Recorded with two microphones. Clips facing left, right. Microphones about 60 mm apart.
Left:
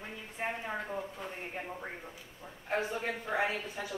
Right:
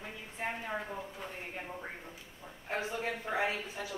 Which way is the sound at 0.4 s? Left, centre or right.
Centre.